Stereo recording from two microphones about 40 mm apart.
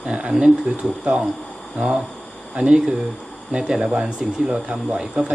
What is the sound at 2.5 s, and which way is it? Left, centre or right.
Speech, right.